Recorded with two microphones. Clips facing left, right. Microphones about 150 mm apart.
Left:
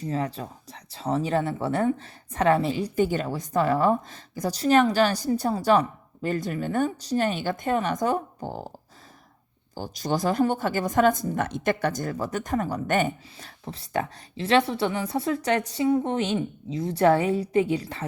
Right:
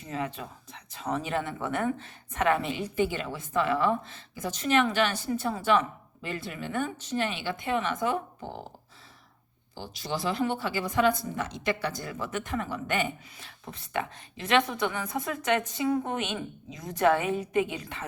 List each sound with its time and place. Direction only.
0.0 s a woman's voice: 35° left (ahead or behind)
9.7 s a woman's voice: 45° left (ahead or behind)